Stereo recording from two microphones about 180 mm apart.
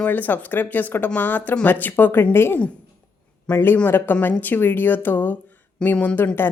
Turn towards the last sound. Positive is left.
turn(degrees=10)  # may be behind; listen again after turning